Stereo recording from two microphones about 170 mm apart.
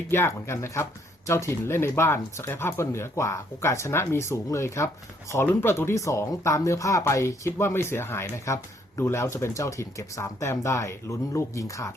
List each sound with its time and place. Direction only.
0.1 s speech: 15° left (ahead or behind)